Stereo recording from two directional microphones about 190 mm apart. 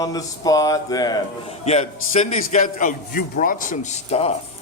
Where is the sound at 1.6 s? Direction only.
35° left (ahead or behind).